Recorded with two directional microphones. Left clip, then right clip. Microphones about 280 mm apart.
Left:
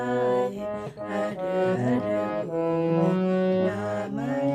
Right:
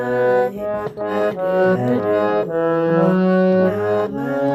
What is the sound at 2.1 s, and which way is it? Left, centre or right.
Brass instrument, right.